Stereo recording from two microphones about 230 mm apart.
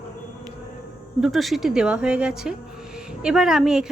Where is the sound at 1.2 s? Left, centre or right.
Centre.